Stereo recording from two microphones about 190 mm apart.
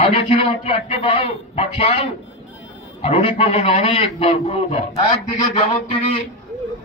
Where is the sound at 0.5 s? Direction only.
30° left (ahead or behind).